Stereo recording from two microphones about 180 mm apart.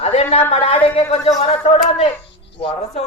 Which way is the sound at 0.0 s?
35° left (ahead or behind).